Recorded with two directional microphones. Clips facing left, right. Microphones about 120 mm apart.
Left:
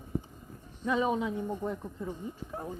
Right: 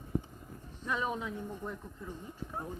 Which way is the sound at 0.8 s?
90° left.